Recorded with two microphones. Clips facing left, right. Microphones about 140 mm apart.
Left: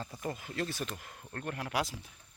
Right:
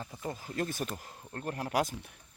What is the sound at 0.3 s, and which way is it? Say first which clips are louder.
Speech: right 2 dB; 40° right (ahead or behind).